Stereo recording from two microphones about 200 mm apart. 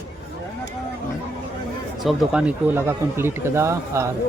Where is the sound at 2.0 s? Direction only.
Centre (ahead or behind).